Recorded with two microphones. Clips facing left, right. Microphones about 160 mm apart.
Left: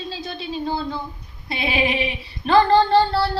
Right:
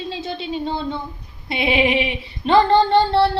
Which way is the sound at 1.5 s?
25° right (ahead or behind).